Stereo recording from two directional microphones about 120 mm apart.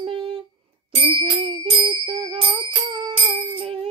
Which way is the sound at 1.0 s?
60° right (ahead or behind).